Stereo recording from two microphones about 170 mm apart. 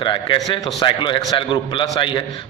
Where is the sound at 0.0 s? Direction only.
30° left (ahead or behind).